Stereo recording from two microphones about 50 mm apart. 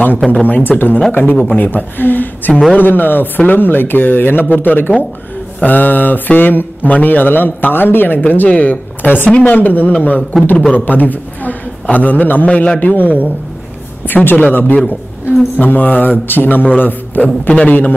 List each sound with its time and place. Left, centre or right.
0.3 s speech: left
1.4 s a man's voice: left
1.7 s a man's voice: left
9.6 s speech: left
10.3 s a man's voice: centre
10.7 s speech: left
12.4 s a man's voice: left
12.8 s speech: left